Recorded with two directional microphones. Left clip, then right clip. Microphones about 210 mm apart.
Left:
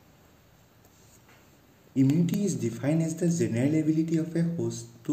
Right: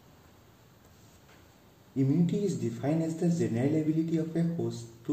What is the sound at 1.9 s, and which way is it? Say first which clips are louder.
Speech: left 3 dB; 40° left (ahead or behind).